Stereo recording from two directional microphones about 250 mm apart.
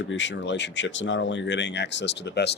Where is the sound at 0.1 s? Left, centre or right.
Left.